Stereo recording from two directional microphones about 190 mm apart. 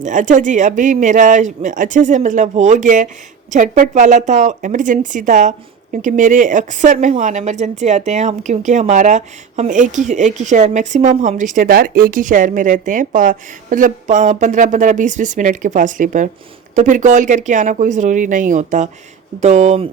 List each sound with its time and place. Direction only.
0.0 s a woman's voice: 40° right (ahead or behind)